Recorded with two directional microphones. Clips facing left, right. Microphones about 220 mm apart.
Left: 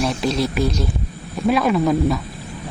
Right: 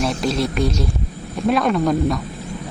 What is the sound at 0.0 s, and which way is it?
Speech, centre (ahead or behind).